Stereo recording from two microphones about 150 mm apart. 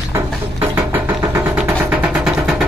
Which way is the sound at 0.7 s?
10° right (ahead or behind).